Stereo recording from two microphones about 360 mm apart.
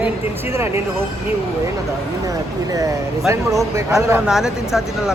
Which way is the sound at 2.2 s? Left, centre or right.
Centre.